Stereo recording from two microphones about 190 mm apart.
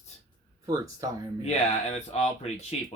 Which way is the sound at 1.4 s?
35° left (ahead or behind).